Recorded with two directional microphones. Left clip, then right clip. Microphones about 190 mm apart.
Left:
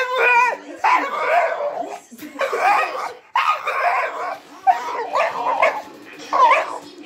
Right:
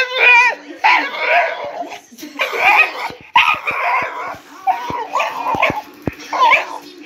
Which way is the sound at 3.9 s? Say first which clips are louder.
Right 3 dB; 50° left (ahead or behind).